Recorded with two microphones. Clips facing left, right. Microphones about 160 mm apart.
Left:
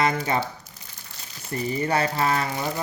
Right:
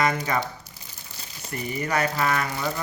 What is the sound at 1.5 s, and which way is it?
Speech, 30° left (ahead or behind).